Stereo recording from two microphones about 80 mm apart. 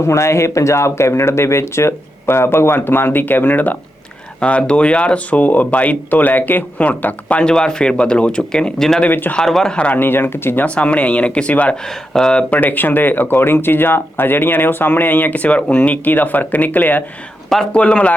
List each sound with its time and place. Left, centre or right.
0.0 s speech: left; by 9.0 s centre
9.0 s speech: left
9.4 s speech: centre
10.0 s speech: left